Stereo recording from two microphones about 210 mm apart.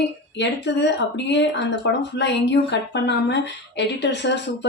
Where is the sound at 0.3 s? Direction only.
55° left (ahead or behind).